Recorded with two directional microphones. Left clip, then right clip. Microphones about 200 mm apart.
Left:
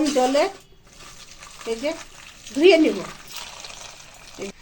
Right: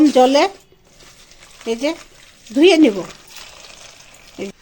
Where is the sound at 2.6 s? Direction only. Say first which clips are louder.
Right 3 dB; 60° right (ahead or behind).